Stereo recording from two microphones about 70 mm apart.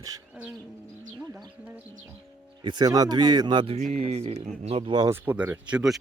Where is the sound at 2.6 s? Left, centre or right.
Right.